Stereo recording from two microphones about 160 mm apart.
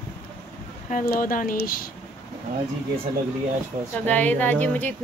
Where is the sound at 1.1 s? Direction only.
65° left (ahead or behind).